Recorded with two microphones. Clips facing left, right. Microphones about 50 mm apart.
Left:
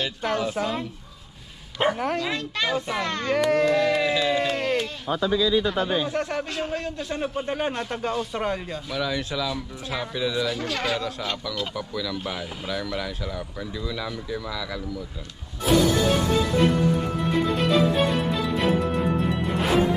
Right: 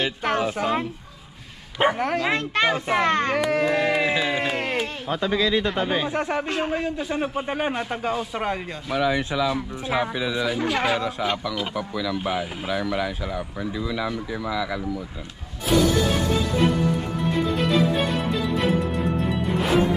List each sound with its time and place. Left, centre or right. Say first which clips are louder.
0.5 s speech: right 2 dB; centre
1.8 s speech: right 3 dB; centre
2.2 s a child's voice: right 5 dB; right
3.3 s speech: left 1 dB; centre
3.7 s music: even; right
5.1 s speech: left 1 dB; right
5.7 s a child's voice: right 1 dB; right
6.0 s speech: right 2 dB; right
8.9 s speech: right 5 dB; right
17.4 s music: even; centre